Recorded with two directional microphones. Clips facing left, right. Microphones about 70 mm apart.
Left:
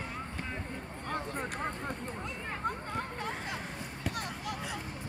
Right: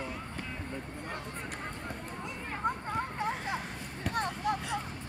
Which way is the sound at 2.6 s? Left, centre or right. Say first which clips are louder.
Right 4 dB; centre.